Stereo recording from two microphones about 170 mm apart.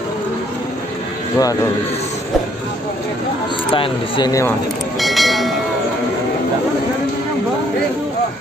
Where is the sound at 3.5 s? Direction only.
30° left (ahead or behind).